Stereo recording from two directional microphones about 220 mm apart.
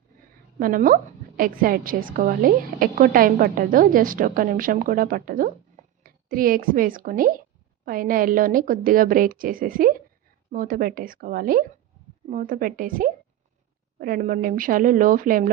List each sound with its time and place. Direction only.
0.6 s a woman's voice: 40° right (ahead or behind)